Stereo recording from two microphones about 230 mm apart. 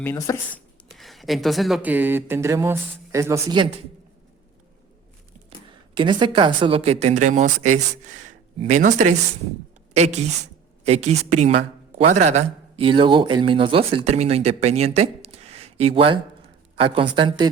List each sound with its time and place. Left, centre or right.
0.0 s speech: centre
0.9 s speech: centre
5.9 s speech: right
8.5 s a woman's voice: right